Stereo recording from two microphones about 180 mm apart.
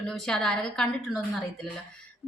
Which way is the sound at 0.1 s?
5° left (ahead or behind).